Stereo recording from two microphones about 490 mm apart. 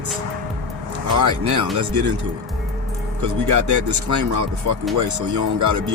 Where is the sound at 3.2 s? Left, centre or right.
Right.